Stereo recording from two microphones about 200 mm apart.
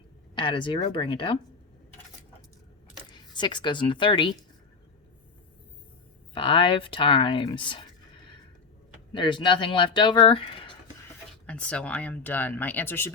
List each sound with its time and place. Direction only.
0.3 s speech: 25° left (ahead or behind)
3.1 s speech: 20° left (ahead or behind)
6.3 s speech: 25° left (ahead or behind)
9.1 s speech: 25° left (ahead or behind)
11.4 s speech: 5° left (ahead or behind)